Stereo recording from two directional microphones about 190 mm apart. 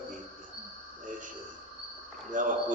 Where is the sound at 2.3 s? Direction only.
45° right (ahead or behind).